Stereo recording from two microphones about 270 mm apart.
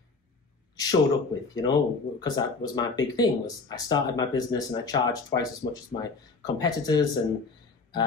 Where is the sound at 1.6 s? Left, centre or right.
Centre.